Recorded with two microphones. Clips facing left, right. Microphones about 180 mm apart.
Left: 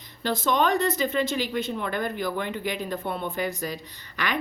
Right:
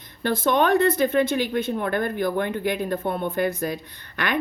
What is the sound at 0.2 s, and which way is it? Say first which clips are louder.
A woman's voice: right 3 dB; 55° right (ahead or behind).